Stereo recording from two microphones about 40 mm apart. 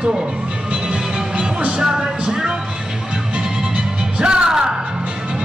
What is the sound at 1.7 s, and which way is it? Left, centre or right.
Speech, centre.